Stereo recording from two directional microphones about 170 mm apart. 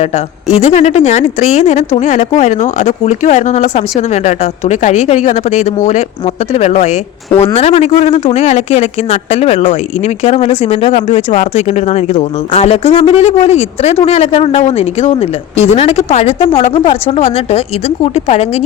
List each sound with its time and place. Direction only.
0.5 s speech: 40° left (ahead or behind)